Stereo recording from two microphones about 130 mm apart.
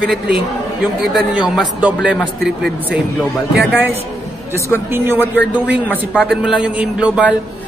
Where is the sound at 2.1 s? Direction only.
5° left (ahead or behind).